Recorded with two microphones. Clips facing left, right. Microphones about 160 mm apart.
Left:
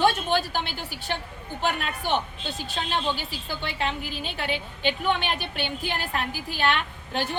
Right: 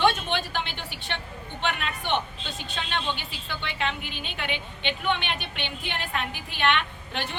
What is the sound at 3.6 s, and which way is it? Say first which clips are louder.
A woman's voice: left 1 dB; 35° left (ahead or behind).